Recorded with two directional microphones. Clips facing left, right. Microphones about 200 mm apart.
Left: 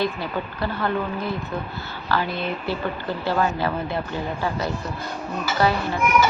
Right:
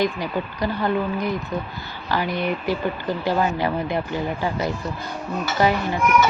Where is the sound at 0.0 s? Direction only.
15° right (ahead or behind).